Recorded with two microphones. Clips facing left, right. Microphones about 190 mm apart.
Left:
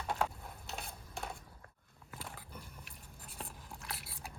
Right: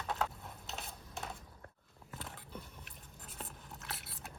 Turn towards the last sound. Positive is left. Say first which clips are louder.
# left 1 dB
turn(degrees=0)  # may be behind; listen again after turning